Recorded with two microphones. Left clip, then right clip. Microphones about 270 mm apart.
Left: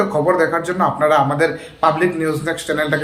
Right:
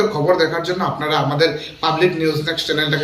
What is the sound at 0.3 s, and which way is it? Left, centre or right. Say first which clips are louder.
A man's voice: even; centre.